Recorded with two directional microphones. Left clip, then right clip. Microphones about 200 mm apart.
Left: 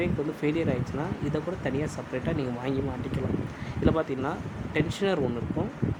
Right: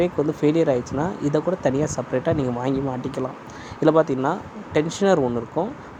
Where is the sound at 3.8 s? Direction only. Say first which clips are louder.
Right 9 dB; 25° right (ahead or behind).